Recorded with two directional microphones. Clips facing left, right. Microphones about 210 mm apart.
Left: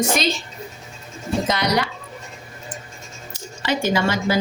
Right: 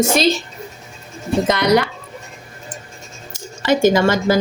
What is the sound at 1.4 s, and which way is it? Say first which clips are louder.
Speech: right 7 dB; 55° right (ahead or behind).